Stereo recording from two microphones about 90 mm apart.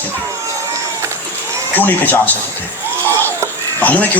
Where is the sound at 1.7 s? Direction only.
20° left (ahead or behind).